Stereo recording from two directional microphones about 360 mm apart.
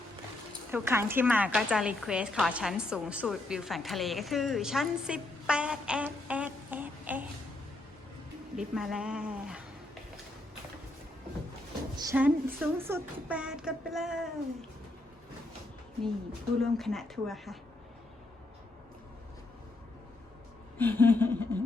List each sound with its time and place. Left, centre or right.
0.7 s a woman's voice: centre
8.5 s child singing: centre
11.9 s child singing: centre
16.6 s child singing: centre
20.7 s child singing: centre